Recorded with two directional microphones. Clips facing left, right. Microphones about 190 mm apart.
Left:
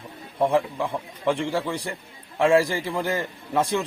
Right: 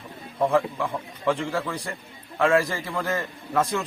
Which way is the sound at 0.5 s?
20° left (ahead or behind).